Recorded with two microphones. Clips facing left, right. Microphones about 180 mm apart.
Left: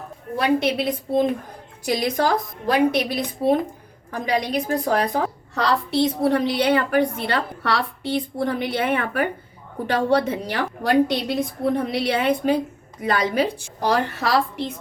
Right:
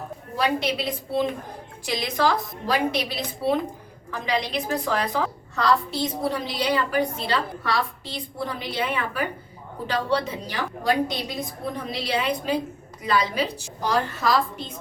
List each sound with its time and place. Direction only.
0.3 s a woman's voice: 50° left (ahead or behind)
5.5 s a woman's voice: 70° left (ahead or behind)